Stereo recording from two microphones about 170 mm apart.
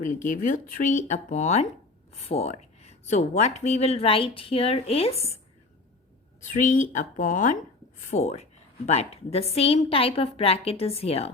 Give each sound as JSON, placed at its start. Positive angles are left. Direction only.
{"t": 0.0, "sound": "speech", "side_deg": 50}
{"t": 6.5, "sound": "speech", "side_deg": 50}